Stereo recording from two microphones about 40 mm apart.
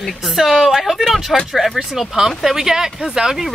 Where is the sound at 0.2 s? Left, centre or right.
Centre.